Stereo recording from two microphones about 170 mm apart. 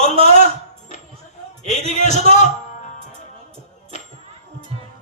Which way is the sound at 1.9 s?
45° left (ahead or behind).